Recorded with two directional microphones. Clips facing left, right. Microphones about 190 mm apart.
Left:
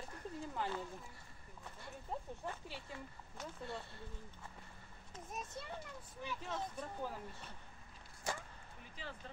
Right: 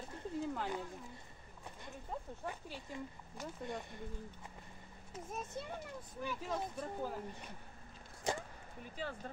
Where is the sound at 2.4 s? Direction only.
15° right (ahead or behind).